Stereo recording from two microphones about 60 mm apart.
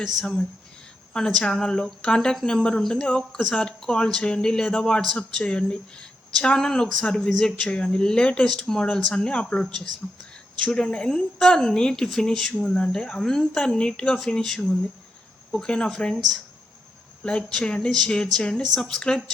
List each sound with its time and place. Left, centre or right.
0.0 s a woman's voice: centre
17.2 s a woman's voice: centre